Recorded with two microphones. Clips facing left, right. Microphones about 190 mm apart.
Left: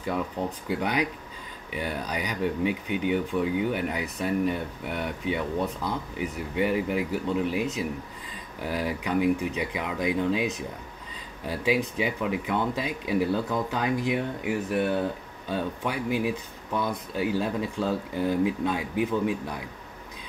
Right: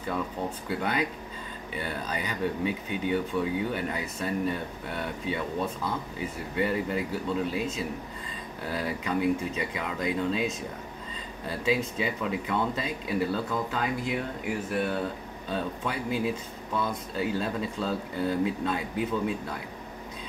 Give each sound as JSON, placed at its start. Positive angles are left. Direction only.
{"t": 0.7, "sound": "speech", "side_deg": 15}
{"t": 8.6, "sound": "speech", "side_deg": 10}